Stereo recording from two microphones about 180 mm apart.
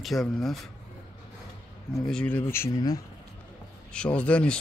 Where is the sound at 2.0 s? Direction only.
5° left (ahead or behind); by 3.0 s 20° left (ahead or behind).